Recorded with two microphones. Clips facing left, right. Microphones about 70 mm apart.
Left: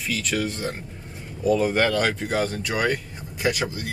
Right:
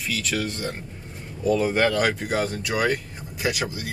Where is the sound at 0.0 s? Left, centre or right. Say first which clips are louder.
Left 1 dB; centre.